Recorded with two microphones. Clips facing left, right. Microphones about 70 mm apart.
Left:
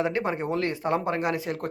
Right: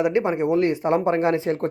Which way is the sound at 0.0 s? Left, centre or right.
Right.